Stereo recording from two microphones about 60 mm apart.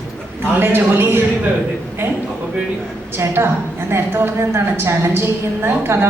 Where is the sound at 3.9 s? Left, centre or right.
Right.